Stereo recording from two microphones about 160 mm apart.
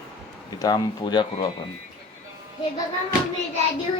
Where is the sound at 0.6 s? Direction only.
25° left (ahead or behind).